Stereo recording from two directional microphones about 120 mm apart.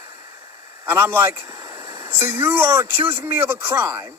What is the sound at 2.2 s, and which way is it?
Speech, 15° right (ahead or behind).